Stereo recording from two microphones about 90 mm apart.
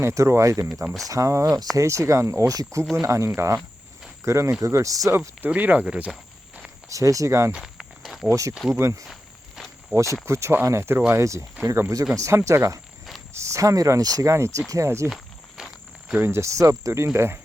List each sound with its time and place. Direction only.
0.0 s speech: 35° right (ahead or behind); by 6.1 s 15° right (ahead or behind)
6.8 s speech: 40° right (ahead or behind)
7.5 s walk: 5° right (ahead or behind)
8.3 s speech: 35° right (ahead or behind)
8.5 s speech: 5° right (ahead or behind)
8.8 s speech: 35° right (ahead or behind)
15.1 s walk: centre (ahead or behind)
16.2 s speech: 30° right (ahead or behind)